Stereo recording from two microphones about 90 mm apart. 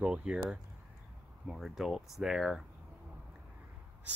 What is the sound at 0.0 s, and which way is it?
Speech, 10° right (ahead or behind).